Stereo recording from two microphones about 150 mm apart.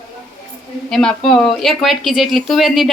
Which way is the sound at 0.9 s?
5° left (ahead or behind).